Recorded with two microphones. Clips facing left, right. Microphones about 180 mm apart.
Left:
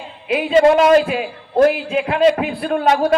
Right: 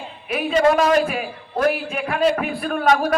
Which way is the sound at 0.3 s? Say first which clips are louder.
Left 5 dB; 25° left (ahead or behind).